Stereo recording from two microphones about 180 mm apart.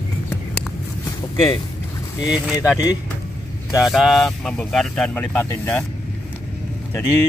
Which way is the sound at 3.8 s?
Centre (ahead or behind).